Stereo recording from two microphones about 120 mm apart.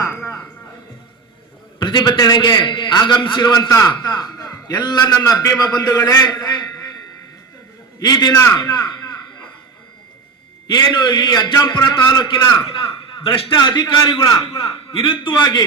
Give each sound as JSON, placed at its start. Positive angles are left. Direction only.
{"t": 0.0, "sound": "music", "side_deg": 25}
{"t": 1.8, "sound": "a man's voice", "side_deg": 35}
{"t": 7.9, "sound": "a man's voice", "side_deg": 35}
{"t": 10.7, "sound": "a man's voice", "side_deg": 40}